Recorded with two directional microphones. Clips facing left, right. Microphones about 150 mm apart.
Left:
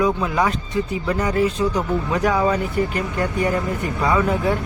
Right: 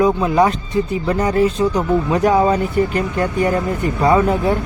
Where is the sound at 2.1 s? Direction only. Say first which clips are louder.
Right 4 dB; 30° right (ahead or behind).